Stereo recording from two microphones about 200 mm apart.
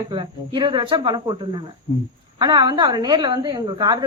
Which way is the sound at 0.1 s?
25° right (ahead or behind).